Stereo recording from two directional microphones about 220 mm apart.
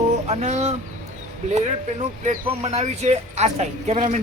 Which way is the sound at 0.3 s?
30° right (ahead or behind).